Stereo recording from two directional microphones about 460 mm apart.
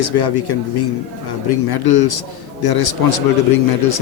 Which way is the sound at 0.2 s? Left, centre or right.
Left.